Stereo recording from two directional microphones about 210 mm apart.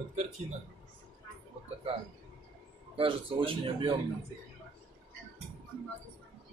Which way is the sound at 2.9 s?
25° right (ahead or behind).